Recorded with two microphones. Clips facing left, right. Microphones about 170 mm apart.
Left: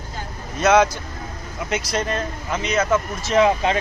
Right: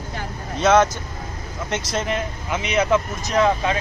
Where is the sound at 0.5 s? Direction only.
10° left (ahead or behind).